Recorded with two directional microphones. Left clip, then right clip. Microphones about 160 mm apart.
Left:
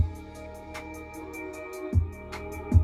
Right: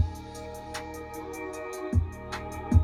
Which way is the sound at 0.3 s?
90° right.